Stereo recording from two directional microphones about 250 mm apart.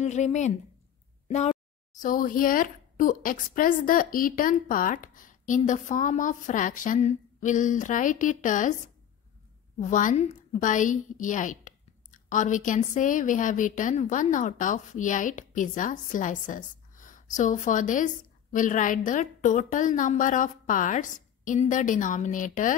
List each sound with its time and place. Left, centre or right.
0.0 s speech: left
1.2 s a sound: left
2.0 s a woman's voice: left